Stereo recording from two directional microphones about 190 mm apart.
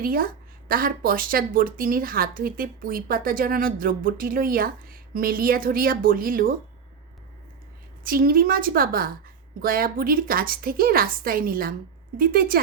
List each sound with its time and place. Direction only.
0.0 s speech: 50° right (ahead or behind)
8.0 s speech: 50° right (ahead or behind)